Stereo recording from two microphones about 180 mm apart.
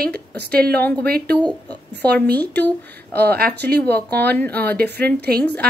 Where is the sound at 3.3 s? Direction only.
60° right (ahead or behind).